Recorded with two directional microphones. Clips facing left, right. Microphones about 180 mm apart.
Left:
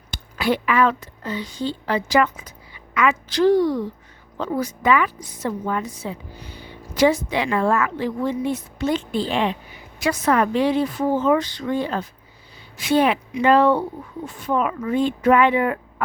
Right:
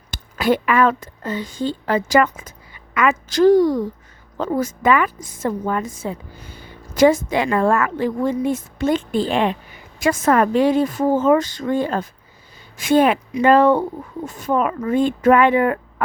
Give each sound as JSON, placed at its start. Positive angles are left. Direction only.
{"t": 0.1, "sound": "a woman's voice", "side_deg": -45}